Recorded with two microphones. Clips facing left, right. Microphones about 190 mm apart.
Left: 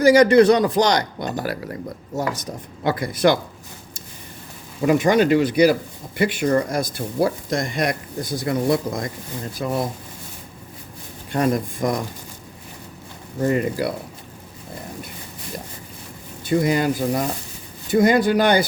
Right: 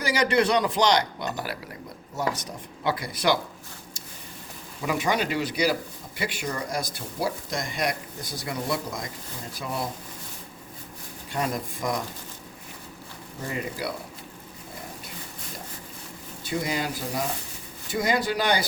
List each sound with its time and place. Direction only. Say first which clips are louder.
0.0 s speech: left 11 dB; 45° left (ahead or behind)
4.9 s speech: left 10 dB; 50° left (ahead or behind)
11.3 s speech: left 8 dB; 50° left (ahead or behind)
13.4 s speech: left 11 dB; 55° left (ahead or behind)
16.5 s speech: left 10 dB; 55° left (ahead or behind)